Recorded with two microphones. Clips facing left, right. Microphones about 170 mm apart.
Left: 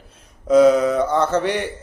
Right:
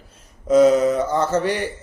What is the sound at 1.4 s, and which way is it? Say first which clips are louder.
Speech: even; 45° right (ahead or behind).